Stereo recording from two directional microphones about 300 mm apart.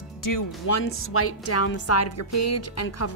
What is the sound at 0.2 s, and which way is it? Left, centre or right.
Speech, left.